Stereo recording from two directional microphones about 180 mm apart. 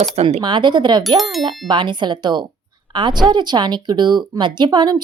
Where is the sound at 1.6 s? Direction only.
25° right (ahead or behind).